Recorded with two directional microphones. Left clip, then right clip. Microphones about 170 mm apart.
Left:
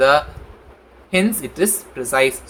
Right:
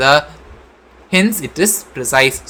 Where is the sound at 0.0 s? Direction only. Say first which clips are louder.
Right 2 dB; 50° right (ahead or behind).